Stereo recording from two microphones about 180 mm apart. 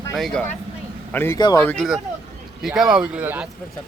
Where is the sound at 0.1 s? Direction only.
Centre (ahead or behind).